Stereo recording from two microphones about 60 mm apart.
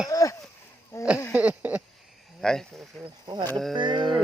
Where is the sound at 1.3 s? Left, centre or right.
Right.